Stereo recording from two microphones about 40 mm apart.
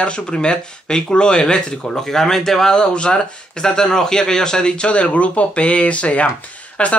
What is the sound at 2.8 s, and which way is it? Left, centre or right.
Speech, left.